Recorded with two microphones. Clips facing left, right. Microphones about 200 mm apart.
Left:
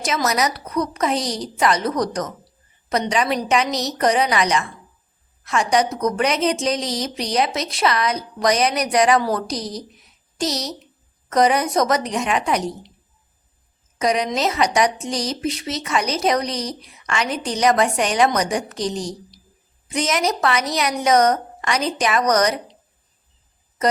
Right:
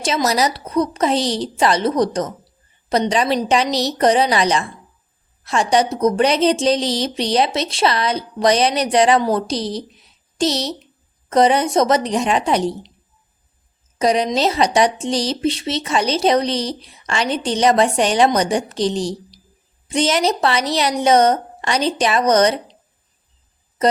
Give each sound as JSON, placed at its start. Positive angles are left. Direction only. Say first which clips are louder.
{"t": 0.0, "sound": "a woman's voice", "louder": "right 3 dB", "side_deg": -30}
{"t": 14.0, "sound": "a woman's voice", "louder": "right 3 dB", "side_deg": -30}